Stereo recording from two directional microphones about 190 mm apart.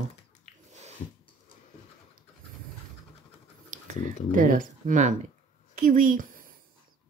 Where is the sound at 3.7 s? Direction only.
40° right (ahead or behind).